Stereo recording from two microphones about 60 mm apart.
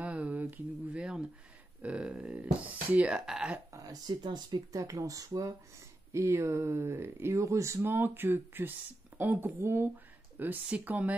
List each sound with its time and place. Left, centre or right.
0.0 s a sound: right
1.8 s speech: centre
3.1 s speech: centre
3.7 s a sound: right
4.5 s speech: right
6.1 s speech: right
7.4 s speech: right
7.8 s speech: right